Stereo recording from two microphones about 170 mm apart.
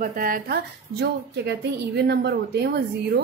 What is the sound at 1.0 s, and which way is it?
Speech, 70° right (ahead or behind).